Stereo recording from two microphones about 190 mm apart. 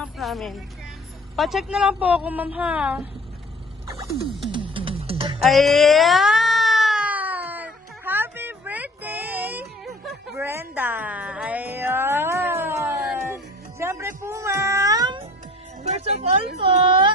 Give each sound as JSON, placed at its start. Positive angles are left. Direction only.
{"t": 0.0, "sound": "music", "side_deg": 0}
{"t": 1.4, "sound": "a woman's voice", "side_deg": 0}
{"t": 4.3, "sound": "music", "side_deg": 0}
{"t": 4.5, "sound": "music", "side_deg": -25}
{"t": 5.5, "sound": "cat", "side_deg": 0}
{"t": 10.3, "sound": "music", "side_deg": -15}
{"t": 15.8, "sound": "music", "side_deg": -35}
{"t": 16.6, "sound": "a woman's voice", "side_deg": -25}